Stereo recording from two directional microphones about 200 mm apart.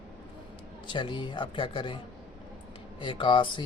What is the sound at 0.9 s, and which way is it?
Speech, 25° left (ahead or behind).